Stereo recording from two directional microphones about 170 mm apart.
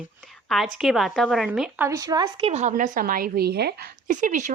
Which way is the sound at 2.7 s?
55° right (ahead or behind).